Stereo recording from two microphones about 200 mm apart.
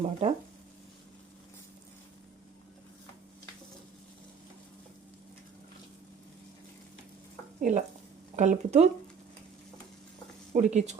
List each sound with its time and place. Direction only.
0.0 s speech: 30° right (ahead or behind)
7.6 s speech: 40° right (ahead or behind)
10.5 s speech: 35° right (ahead or behind)